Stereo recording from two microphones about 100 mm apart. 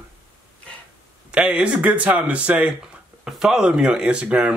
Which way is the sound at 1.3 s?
10° right (ahead or behind).